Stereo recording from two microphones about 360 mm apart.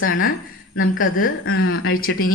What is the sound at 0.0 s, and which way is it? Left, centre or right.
A woman's voice, left.